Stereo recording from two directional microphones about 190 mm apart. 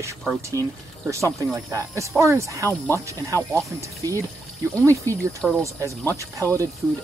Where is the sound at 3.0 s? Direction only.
15° right (ahead or behind).